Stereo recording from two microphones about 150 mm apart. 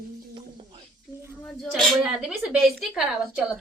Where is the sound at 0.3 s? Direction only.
35° right (ahead or behind).